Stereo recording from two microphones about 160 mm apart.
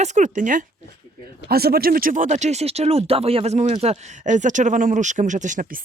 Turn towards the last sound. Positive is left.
turn(degrees=-50)  # may be behind; listen again after turning